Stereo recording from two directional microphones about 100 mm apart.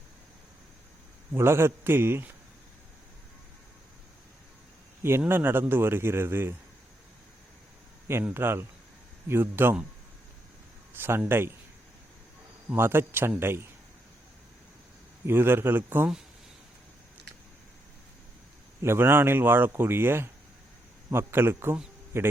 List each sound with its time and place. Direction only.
1.3 s speech: 25° right (ahead or behind)
5.3 s speech: 20° right (ahead or behind)
8.3 s speech: 25° right (ahead or behind)
10.9 s speech: 20° right (ahead or behind)
12.6 s speech: 25° right (ahead or behind)
15.3 s speech: 20° right (ahead or behind)
18.8 s speech: 25° right (ahead or behind)